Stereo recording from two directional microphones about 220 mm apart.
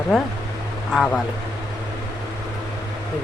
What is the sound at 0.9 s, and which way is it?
Speech, centre (ahead or behind).